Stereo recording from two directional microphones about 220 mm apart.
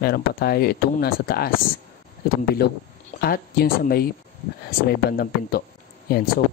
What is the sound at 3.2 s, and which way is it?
Speech, 45° left (ahead or behind).